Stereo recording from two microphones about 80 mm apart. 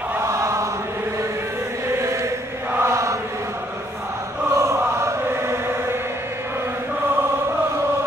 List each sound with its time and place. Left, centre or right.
0.2 s chant: right
1.9 s chant: right
2.8 s mantra: right
4.6 s chant: right